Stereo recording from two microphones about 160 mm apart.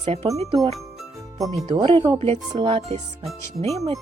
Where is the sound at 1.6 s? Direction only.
30° right (ahead or behind).